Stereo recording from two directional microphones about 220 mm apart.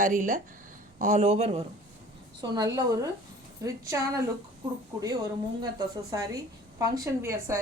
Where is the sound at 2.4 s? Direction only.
15° right (ahead or behind).